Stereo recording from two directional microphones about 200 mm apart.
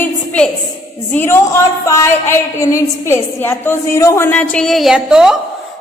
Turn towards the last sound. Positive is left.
turn(degrees=-5)  # may be behind; listen again after turning